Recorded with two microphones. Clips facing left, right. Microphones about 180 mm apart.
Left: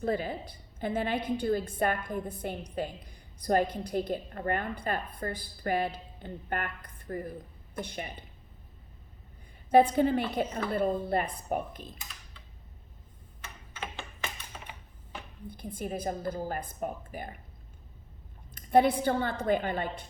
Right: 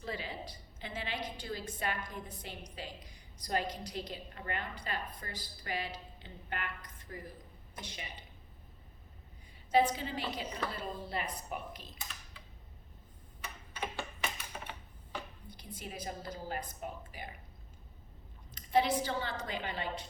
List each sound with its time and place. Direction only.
0.0 s a woman's voice: 50° left (ahead or behind)
9.6 s a woman's voice: 55° left (ahead or behind)
15.5 s a woman's voice: 50° left (ahead or behind)
18.5 s a woman's voice: 55° left (ahead or behind)